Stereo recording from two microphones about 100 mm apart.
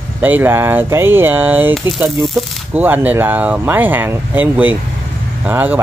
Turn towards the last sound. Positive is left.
turn(degrees=-15)  # may be behind; listen again after turning